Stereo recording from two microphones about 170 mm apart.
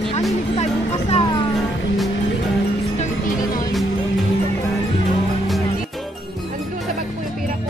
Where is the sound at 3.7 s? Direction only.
Centre (ahead or behind).